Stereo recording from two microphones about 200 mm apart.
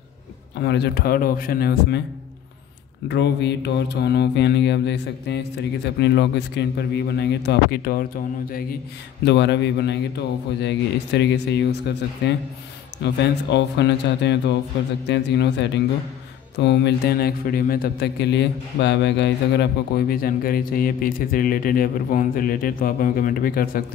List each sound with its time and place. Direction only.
0.6 s a man's voice: 55° left (ahead or behind)
3.1 s mantra: 60° left (ahead or behind)
9.2 s mantra: 60° left (ahead or behind)
13.0 s mantra: 60° left (ahead or behind)
16.5 s a man's voice: 60° left (ahead or behind)